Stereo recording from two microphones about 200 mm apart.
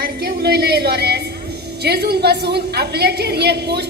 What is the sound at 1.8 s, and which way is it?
A woman's voice, 55° right (ahead or behind).